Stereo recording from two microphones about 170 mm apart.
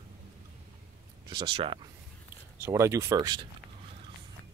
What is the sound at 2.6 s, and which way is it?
Speech, 15° right (ahead or behind).